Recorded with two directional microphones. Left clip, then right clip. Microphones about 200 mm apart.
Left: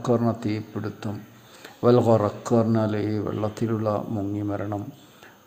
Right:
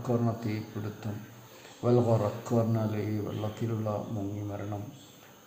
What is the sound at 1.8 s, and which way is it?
A man's voice, 45° left (ahead or behind).